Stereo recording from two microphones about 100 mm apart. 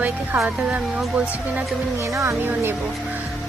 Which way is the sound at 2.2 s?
25° right (ahead or behind).